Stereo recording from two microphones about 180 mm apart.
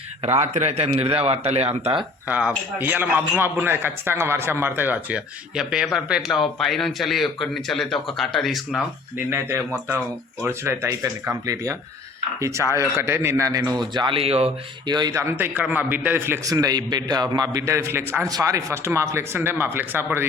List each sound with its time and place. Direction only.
0.2 s a man's voice: 35° right (ahead or behind)
2.2 s speech: 10° right (ahead or behind)
9.3 s speech: 10° right (ahead or behind)
13.9 s speech: 25° right (ahead or behind); by 20.2 s 10° right (ahead or behind)